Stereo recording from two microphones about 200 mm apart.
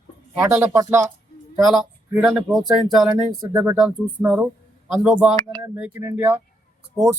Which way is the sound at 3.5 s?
20° right (ahead or behind).